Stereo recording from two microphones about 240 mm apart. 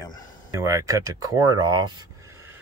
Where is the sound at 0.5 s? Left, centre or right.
Centre.